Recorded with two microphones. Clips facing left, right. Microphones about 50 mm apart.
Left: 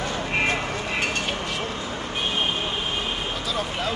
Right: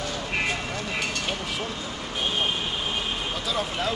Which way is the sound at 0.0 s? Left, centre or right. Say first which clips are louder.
Left 3 dB; left.